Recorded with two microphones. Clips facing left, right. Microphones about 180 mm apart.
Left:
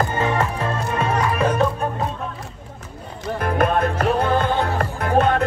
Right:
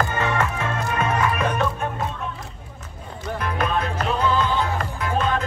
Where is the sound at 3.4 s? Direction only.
50° left (ahead or behind).